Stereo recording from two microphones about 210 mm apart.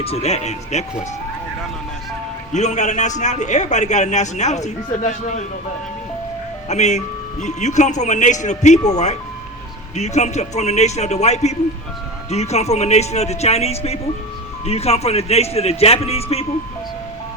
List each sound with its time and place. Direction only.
0.0 s a man's voice: 30° left (ahead or behind)
2.5 s a man's voice: 35° left (ahead or behind)
6.7 s a man's voice: 35° left (ahead or behind)
9.9 s a man's voice: 30° left (ahead or behind)